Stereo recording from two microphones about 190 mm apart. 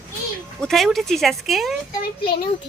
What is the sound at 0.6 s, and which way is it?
Speech, centre (ahead or behind).